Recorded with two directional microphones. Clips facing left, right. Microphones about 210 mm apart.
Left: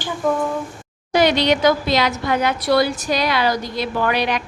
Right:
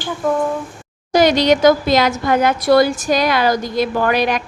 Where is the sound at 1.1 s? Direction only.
45° right (ahead or behind).